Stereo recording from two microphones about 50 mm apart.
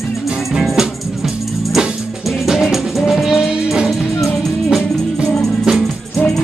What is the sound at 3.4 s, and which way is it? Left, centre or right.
Music, centre.